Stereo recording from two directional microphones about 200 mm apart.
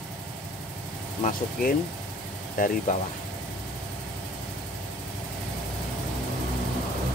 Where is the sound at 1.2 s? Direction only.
45° left (ahead or behind).